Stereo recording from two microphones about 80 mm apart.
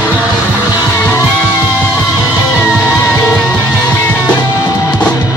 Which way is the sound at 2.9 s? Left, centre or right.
Left.